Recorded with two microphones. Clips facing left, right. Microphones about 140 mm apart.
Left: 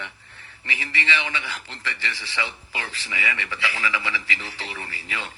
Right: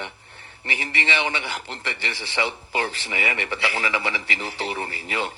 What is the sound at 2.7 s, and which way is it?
A man's voice, 35° right (ahead or behind).